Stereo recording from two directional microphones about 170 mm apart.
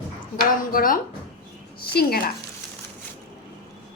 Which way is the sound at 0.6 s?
55° left (ahead or behind).